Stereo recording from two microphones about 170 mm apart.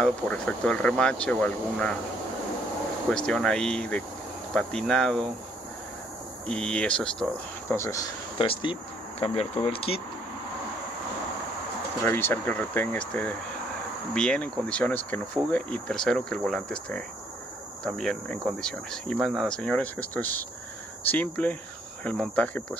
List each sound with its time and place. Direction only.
0.0 s speech: 5° left (ahead or behind)
3.3 s speech: 5° left (ahead or behind)
6.4 s speech: 5° left (ahead or behind)
7.6 s speech: 15° left (ahead or behind)
8.4 s speech: 30° left (ahead or behind)
12.0 s speech: 15° left (ahead or behind)